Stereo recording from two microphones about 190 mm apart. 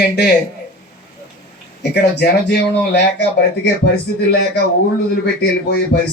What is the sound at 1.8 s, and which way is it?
Speech, 60° left (ahead or behind).